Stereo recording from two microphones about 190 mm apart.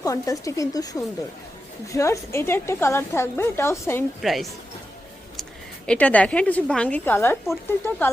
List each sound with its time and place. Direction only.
0.0 s a woman's voice: 15° left (ahead or behind)
4.2 s a woman's voice: centre (ahead or behind)